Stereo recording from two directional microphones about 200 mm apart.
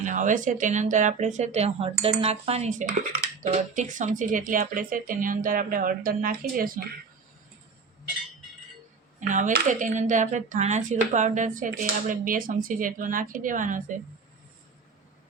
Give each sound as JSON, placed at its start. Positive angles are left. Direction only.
{"t": 0.0, "sound": "a woman's voice", "side_deg": -40}
{"t": 9.2, "sound": "speech", "side_deg": -40}